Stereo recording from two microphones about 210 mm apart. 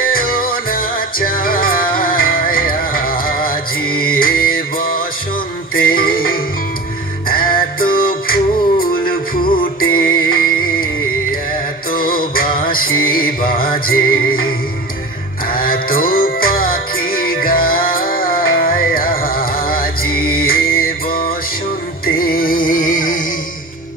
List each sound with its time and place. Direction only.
0.0 s music: 45° left (ahead or behind)
11.9 s music: 45° left (ahead or behind)
15.5 s music: 45° left (ahead or behind)